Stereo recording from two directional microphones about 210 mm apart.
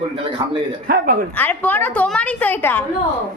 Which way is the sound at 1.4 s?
10° left (ahead or behind).